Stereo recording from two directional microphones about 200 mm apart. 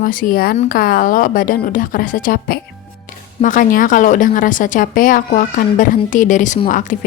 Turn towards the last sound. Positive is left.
turn(degrees=40)  # may be behind; listen again after turning